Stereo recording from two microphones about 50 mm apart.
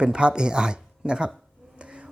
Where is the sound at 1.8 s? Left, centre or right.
Centre.